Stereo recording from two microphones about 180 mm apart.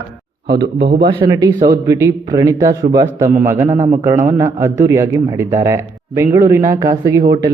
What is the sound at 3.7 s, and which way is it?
Speech, 35° right (ahead or behind).